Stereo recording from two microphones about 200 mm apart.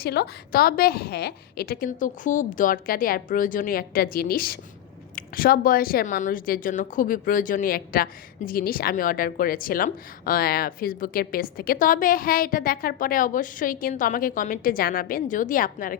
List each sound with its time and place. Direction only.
0.0 s speech: 50° left (ahead or behind)